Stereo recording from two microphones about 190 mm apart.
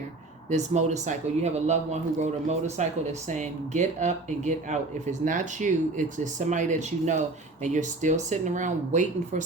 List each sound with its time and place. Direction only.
0.5 s speech: 35° right (ahead or behind)